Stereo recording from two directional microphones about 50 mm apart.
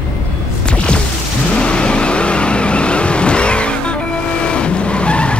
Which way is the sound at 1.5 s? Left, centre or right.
Centre.